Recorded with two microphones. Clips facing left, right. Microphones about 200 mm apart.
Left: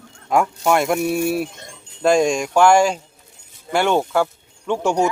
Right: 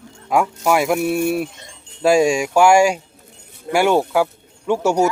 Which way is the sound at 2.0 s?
5° right (ahead or behind).